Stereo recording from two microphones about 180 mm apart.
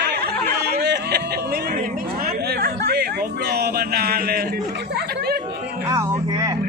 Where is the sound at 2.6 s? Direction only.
60° right (ahead or behind).